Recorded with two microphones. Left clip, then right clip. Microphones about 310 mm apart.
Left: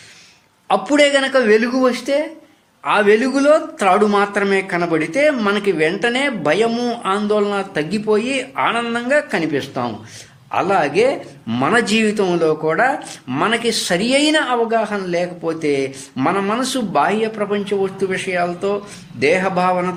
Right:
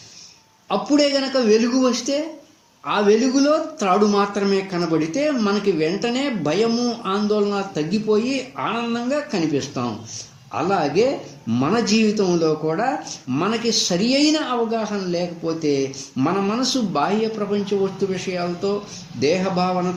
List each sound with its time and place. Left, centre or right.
0.9 s a man's voice: left